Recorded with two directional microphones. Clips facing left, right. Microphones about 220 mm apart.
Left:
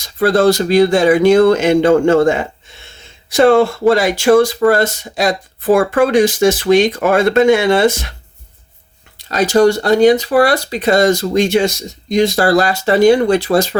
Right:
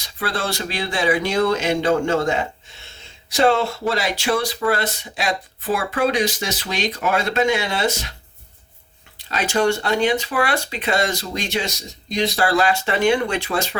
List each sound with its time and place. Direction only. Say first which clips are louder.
0.0 s speech: left 14 dB; 40° left (ahead or behind)
9.3 s speech: left 8 dB; 40° left (ahead or behind)